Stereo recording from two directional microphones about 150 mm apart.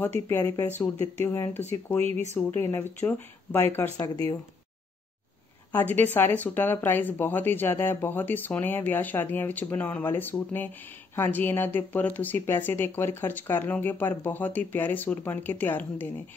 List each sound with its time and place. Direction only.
0.0 s speech: 15° left (ahead or behind)
5.7 s speech: 10° left (ahead or behind)